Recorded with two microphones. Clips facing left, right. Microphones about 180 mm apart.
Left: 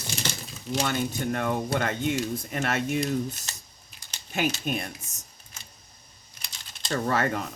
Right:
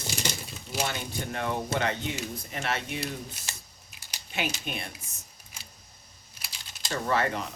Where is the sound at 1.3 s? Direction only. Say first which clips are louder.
Left 1 dB; 50° left (ahead or behind).